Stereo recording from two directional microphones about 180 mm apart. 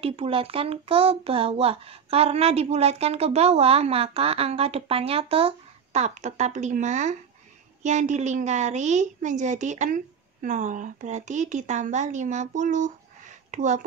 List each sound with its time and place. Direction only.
0.0 s a woman's voice: 30° right (ahead or behind)